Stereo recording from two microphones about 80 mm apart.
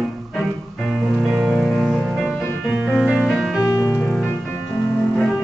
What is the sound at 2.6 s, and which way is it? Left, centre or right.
Music, centre.